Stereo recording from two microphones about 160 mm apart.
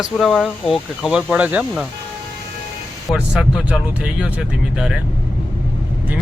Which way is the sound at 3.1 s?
5° right (ahead or behind).